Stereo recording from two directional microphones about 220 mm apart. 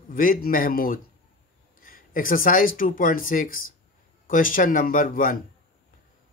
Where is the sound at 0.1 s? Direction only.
40° left (ahead or behind).